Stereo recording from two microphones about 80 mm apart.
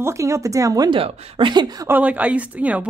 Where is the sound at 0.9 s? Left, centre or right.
Right.